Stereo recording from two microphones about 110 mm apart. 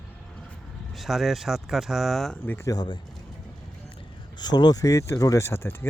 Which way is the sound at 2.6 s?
40° left (ahead or behind).